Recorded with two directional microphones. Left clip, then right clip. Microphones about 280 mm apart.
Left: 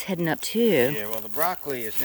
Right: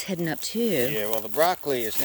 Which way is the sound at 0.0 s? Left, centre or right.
Centre.